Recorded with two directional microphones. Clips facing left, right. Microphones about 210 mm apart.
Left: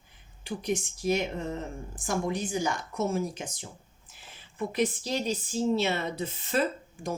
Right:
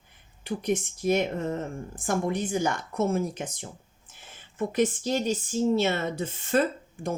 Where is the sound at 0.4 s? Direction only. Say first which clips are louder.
Right 3 dB; 55° right (ahead or behind).